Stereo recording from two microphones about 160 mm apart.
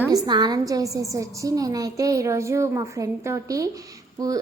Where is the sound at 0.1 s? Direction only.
25° right (ahead or behind).